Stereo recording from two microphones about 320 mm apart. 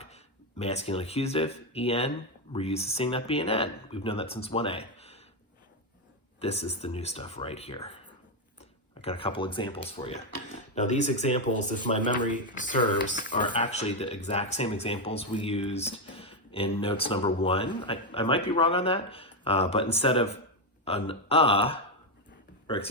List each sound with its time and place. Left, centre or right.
0.6 s speech: centre
6.4 s speech: centre
9.0 s speech: centre